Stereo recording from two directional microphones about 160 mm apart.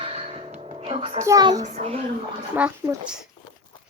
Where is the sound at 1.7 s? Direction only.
40° right (ahead or behind).